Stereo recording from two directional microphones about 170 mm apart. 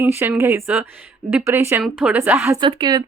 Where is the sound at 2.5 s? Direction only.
25° right (ahead or behind).